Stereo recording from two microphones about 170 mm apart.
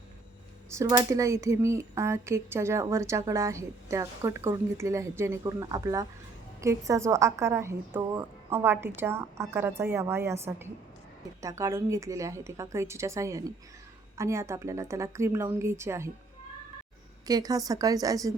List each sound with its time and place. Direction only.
0.8 s speech: 20° right (ahead or behind)
17.2 s a woman's voice: 20° right (ahead or behind)